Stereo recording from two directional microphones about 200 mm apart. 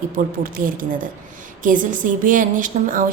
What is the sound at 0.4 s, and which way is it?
A woman's voice, 45° right (ahead or behind).